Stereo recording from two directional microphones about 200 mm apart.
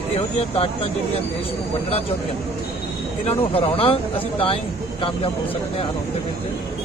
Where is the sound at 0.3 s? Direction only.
30° left (ahead or behind).